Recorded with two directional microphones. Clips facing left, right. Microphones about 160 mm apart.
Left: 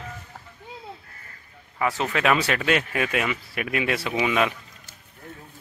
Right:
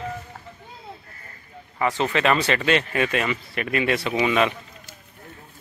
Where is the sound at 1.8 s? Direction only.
5° left (ahead or behind).